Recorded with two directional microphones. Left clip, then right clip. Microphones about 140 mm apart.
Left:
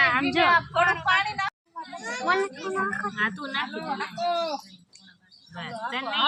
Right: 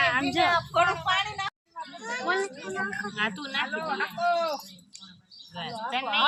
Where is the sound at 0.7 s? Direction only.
10° left (ahead or behind).